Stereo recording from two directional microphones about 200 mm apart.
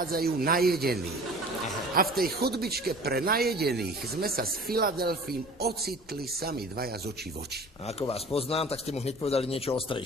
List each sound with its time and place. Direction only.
0.0 s speech: 50° right (ahead or behind)
2.1 s speech: 50° right (ahead or behind)
7.9 s speech: 30° left (ahead or behind)